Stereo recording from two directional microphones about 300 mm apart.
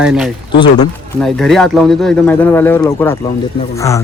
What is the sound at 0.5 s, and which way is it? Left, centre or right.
Speech, centre.